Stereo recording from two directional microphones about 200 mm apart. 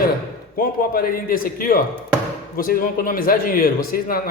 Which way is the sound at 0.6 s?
45° left (ahead or behind).